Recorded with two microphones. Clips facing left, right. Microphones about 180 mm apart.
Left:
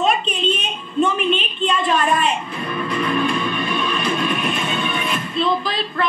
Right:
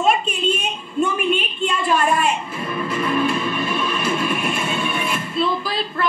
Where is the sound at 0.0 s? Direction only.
10° right (ahead or behind).